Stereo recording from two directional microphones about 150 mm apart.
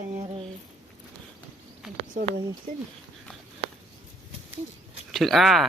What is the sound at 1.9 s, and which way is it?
Speech, 60° right (ahead or behind).